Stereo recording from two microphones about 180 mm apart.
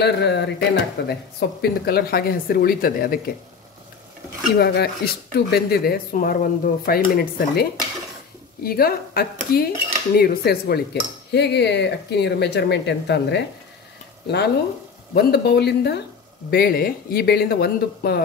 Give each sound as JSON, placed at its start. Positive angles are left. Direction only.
{"t": 0.0, "sound": "cutlery", "side_deg": 70}
{"t": 1.6, "sound": "speech", "side_deg": 60}
{"t": 4.6, "sound": "speech", "side_deg": 60}
{"t": 8.6, "sound": "speech", "side_deg": 55}
{"t": 10.1, "sound": "cutlery", "side_deg": 60}
{"t": 15.1, "sound": "speech", "side_deg": 65}